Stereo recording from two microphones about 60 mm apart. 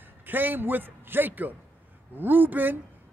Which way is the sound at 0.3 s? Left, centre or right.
Right.